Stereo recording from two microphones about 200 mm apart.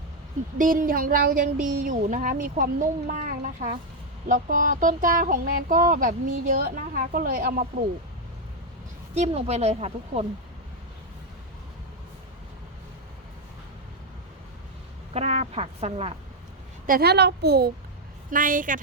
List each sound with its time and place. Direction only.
0.6 s speech: 45° right (ahead or behind)
9.1 s speech: 35° right (ahead or behind)
15.1 s speech: 35° right (ahead or behind)
16.8 s speech: 50° right (ahead or behind)
18.3 s speech: 40° right (ahead or behind)